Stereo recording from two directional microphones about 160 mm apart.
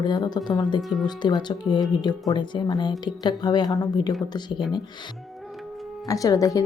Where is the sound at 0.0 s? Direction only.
25° left (ahead or behind).